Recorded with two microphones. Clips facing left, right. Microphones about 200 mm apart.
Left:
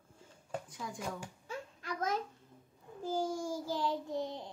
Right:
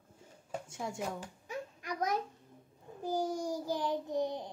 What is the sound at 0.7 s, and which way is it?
Speech, 25° right (ahead or behind).